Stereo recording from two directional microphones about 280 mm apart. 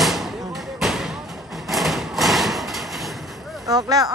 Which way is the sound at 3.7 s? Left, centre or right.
Centre.